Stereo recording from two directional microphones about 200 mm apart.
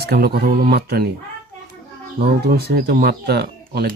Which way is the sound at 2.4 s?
55° right (ahead or behind).